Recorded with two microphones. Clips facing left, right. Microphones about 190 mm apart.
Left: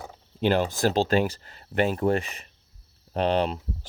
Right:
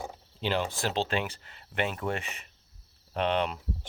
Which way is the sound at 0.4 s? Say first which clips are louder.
Left 7 dB; 45° left (ahead or behind).